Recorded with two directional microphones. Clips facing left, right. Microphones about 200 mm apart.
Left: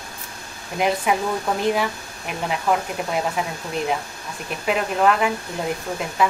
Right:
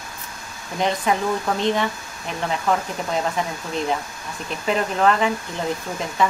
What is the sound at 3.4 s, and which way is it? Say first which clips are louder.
Speech: right 1 dB; 5° left (ahead or behind).